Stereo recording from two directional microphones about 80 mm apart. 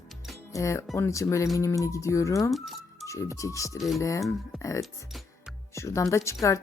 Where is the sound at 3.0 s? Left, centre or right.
Left.